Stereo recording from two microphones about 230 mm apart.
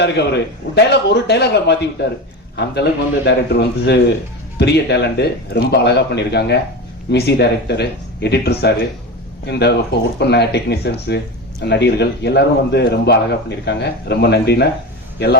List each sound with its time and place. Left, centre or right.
0.0 s a man's voice: left